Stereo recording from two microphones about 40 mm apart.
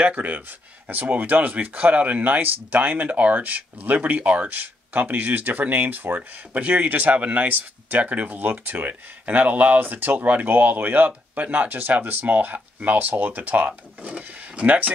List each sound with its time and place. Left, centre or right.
0.0 s speech: right
12.0 s speech: right
13.7 s speech: right